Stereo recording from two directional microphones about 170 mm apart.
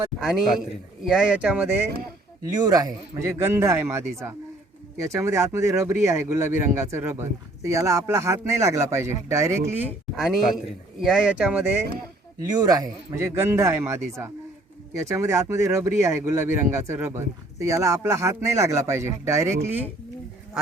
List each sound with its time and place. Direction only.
0.2 s a man's voice: centre (ahead or behind)
2.4 s speech: 20° right (ahead or behind); by 11.7 s 5° right (ahead or behind)
12.4 s speech: 20° right (ahead or behind)
15.0 s speech: 15° right (ahead or behind)